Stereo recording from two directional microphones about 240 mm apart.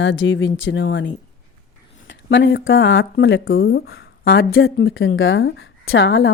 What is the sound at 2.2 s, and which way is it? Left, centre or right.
A woman's voice, left.